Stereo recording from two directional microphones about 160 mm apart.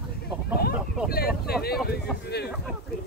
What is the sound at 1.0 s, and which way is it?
Boat, 70° left (ahead or behind).